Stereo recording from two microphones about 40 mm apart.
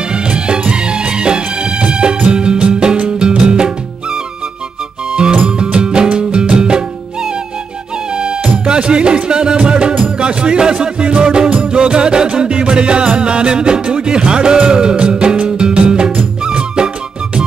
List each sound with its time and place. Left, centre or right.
0.1 s music of bollywood: right
2.3 s music: right
5.1 s music: right
8.1 s music: right